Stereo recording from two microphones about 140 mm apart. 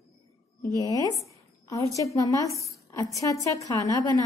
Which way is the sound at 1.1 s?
25° left (ahead or behind).